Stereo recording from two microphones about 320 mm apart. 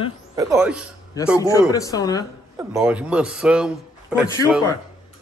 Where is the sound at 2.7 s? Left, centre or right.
Centre.